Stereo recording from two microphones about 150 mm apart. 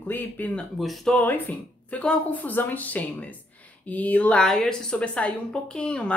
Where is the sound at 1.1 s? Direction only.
10° left (ahead or behind).